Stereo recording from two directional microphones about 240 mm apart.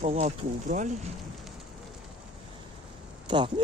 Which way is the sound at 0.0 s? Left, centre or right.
Right.